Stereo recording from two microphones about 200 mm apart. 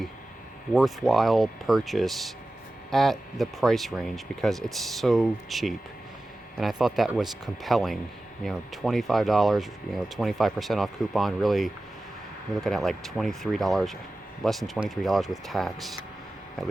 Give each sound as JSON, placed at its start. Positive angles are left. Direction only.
{"t": 0.7, "sound": "speech", "side_deg": 0}